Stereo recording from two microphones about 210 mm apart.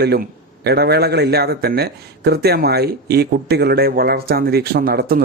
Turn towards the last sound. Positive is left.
turn(degrees=-45)  # may be behind; listen again after turning